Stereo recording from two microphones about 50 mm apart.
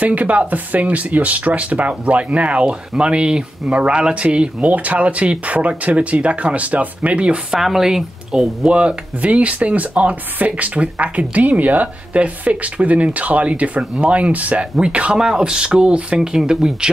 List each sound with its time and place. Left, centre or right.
0.0 s speech: right
7.6 s speech: centre